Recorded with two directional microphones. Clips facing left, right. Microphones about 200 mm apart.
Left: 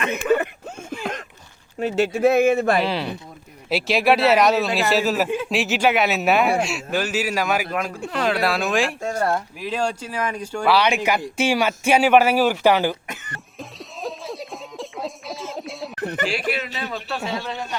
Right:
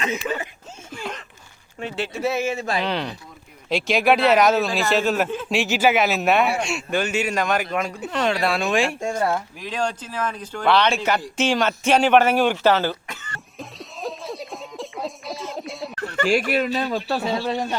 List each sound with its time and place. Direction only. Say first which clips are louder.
0.0 s speech: left 6 dB; 60° left (ahead or behind)
0.9 s a sound: left 3 dB; 50° left (ahead or behind)
1.8 s speech: left 7 dB; 50° left (ahead or behind)
2.8 s a man's voice: left 1 dB; 5° left (ahead or behind)
9.0 s speech: even; 10° right (ahead or behind)
9.2 s speech: left 1 dB; 5° left (ahead or behind)
13.6 s a sound: even; centre (ahead or behind)
16.0 s speech: even; 15° left (ahead or behind)
16.2 s speech: right 7 dB; 45° right (ahead or behind)